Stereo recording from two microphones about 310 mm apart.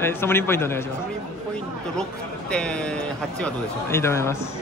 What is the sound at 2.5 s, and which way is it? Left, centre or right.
A man's voice, centre.